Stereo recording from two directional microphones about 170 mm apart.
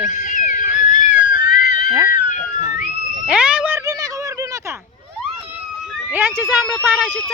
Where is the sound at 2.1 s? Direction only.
50° left (ahead or behind).